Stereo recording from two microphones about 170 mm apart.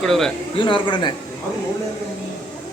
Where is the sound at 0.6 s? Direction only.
30° left (ahead or behind).